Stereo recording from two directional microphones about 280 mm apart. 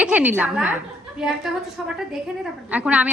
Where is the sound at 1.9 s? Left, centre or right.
Centre.